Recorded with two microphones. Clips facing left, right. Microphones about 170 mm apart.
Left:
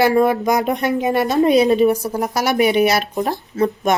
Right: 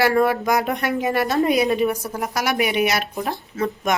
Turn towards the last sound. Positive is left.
turn(degrees=35)  # may be behind; listen again after turning